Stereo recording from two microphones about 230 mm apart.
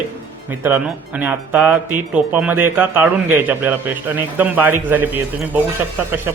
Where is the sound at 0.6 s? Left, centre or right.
Centre.